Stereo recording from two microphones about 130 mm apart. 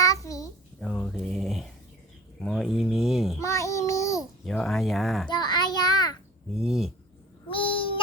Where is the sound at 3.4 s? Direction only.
25° left (ahead or behind).